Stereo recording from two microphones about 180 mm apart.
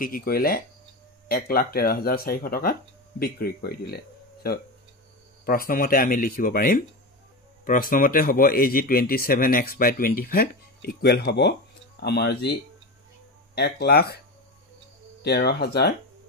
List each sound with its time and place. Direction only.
0.0 s speech: 55° left (ahead or behind)
13.6 s speech: 65° left (ahead or behind)
15.2 s speech: 65° left (ahead or behind)